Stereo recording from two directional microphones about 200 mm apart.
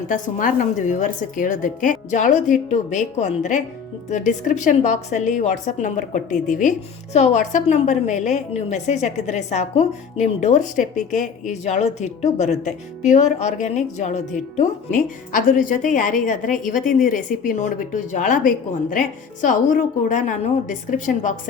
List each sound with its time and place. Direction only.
0.1 s a woman's voice: 40° left (ahead or behind)